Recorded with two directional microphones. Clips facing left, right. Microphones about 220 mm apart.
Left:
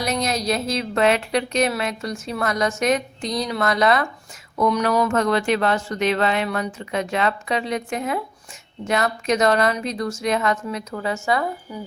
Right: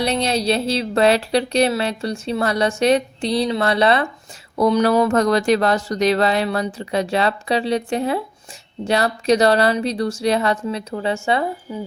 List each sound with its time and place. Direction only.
0.0 s a woman's voice: 30° right (ahead or behind)